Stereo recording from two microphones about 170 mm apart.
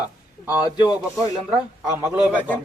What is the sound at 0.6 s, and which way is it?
Speech, 25° left (ahead or behind).